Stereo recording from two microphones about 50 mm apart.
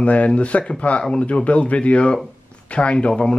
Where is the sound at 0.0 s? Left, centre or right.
Left.